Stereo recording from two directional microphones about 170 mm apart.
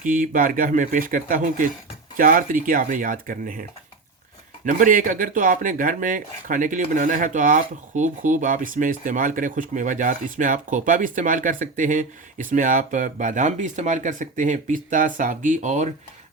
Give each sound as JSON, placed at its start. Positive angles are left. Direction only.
{"t": 0.0, "sound": "speech", "side_deg": -55}